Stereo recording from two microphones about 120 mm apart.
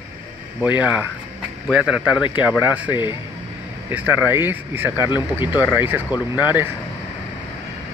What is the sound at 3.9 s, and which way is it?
Speech, 10° right (ahead or behind).